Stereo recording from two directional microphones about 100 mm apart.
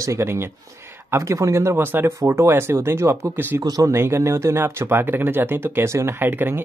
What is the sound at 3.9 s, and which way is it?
Speech, 25° right (ahead or behind).